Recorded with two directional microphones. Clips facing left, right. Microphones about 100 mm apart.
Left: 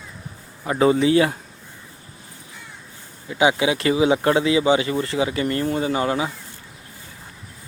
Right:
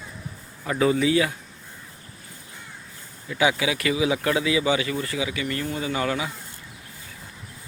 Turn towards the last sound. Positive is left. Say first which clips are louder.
# left 4 dB
turn(degrees=30)  # may be behind; listen again after turning